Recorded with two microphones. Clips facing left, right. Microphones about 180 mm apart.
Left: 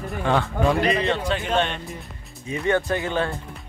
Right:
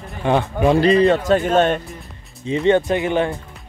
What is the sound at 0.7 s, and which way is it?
A man's voice, 35° right (ahead or behind).